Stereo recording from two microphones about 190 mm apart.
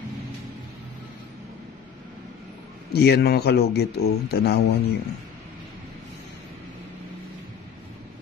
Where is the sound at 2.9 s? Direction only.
60° left (ahead or behind).